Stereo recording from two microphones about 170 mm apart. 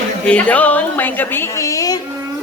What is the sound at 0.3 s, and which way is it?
A woman's voice, 10° left (ahead or behind).